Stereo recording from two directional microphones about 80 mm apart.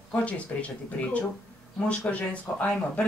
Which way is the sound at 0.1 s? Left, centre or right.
Centre.